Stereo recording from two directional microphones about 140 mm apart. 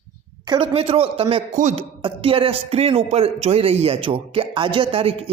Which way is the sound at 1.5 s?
55° right (ahead or behind).